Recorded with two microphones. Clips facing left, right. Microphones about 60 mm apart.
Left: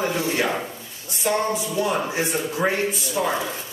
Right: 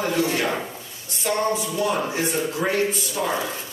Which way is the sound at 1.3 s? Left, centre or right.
Centre.